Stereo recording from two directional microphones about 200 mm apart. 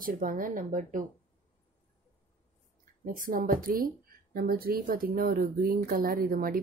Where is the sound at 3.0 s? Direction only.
45° right (ahead or behind).